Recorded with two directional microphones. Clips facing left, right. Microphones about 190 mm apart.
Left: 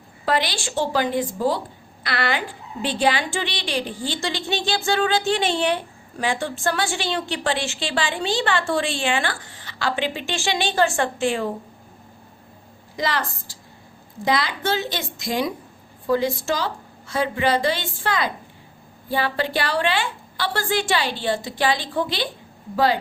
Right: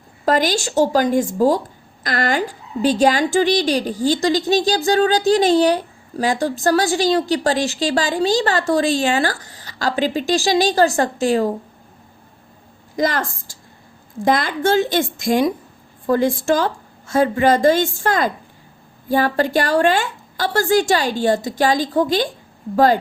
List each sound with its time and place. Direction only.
0.3 s a woman's voice: 45° right (ahead or behind)
13.0 s a woman's voice: 45° right (ahead or behind)